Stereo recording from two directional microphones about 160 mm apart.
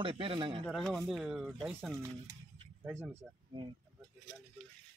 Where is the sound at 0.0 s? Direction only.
35° right (ahead or behind).